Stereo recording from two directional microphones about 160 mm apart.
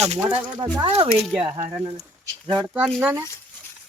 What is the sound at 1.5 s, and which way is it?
Speech, 30° right (ahead or behind).